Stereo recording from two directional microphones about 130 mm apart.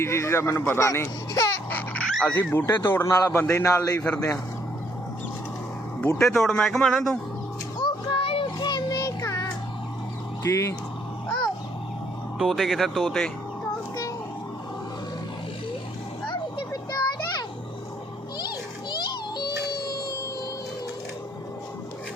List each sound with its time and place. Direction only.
0.0 s a man's voice: 20° left (ahead or behind)
3.9 s speech: 10° left (ahead or behind)
6.1 s speech: 5° left (ahead or behind)
7.8 s music: 40° left (ahead or behind)
8.5 s a sound: 30° left (ahead or behind)
10.4 s a man's voice: 25° left (ahead or behind)
12.4 s speech: centre (ahead or behind)
16.3 s children playing: 35° left (ahead or behind)
18.3 s a sound: 35° left (ahead or behind)
19.4 s music: 35° left (ahead or behind)